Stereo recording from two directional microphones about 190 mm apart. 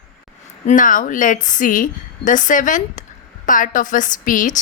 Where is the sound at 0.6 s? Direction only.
45° left (ahead or behind).